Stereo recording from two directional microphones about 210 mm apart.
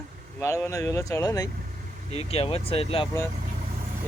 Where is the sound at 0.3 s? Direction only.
10° left (ahead or behind).